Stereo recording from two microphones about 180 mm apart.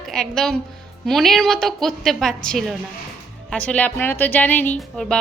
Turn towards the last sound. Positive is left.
turn(degrees=5)  # may be behind; listen again after turning